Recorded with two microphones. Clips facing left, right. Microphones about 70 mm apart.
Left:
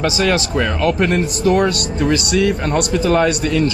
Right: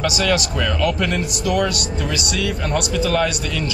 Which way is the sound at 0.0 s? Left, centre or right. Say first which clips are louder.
Left 3 dB; left.